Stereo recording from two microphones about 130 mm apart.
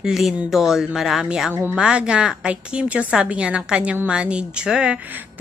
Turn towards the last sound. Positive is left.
turn(degrees=-5)  # may be behind; listen again after turning